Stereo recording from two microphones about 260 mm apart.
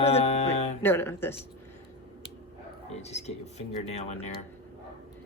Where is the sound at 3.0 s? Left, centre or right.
Left.